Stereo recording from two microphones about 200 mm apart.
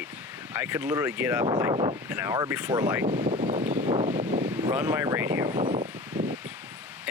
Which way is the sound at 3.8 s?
30° right (ahead or behind).